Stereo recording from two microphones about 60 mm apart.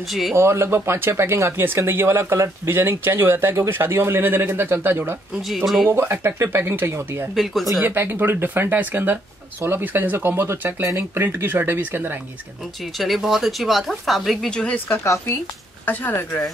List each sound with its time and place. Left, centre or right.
0.3 s speech: right
7.3 s speech: centre
7.8 s speech: right
12.9 s speech: centre
14.5 s speech: centre
15.8 s speech: left